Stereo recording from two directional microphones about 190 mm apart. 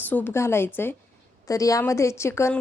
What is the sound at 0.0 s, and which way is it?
A woman's voice, 10° left (ahead or behind).